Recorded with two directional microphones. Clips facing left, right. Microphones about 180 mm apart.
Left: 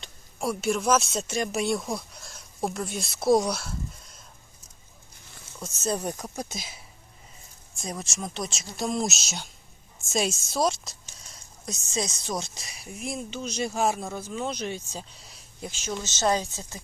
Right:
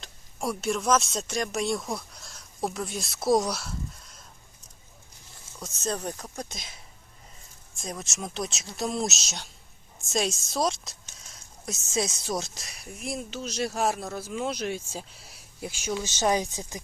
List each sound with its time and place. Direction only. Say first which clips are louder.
0.0 s speech: left 1 dB; centre (ahead or behind)
5.5 s speech: left 2 dB; 5° left (ahead or behind)
7.8 s speech: left 1 dB; centre (ahead or behind); by 16.8 s 15° right (ahead or behind)